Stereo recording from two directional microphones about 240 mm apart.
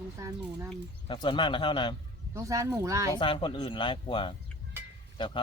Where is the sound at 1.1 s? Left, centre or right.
Centre.